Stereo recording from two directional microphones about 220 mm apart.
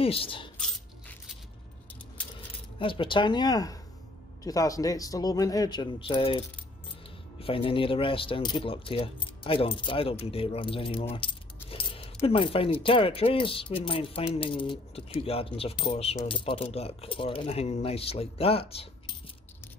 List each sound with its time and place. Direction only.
0.0 s speech: 25° left (ahead or behind)
2.8 s a man's voice: 25° left (ahead or behind)